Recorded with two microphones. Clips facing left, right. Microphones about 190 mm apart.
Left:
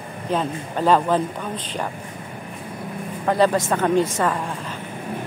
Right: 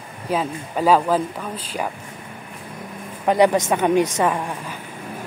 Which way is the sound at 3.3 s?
15° right (ahead or behind).